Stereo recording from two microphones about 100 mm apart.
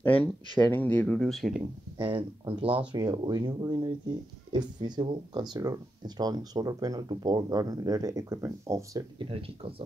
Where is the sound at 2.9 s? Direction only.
45° right (ahead or behind).